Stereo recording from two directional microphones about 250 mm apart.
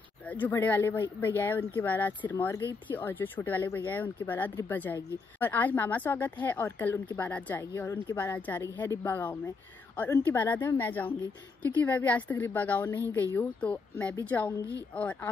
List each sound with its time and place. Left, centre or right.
0.3 s speech: centre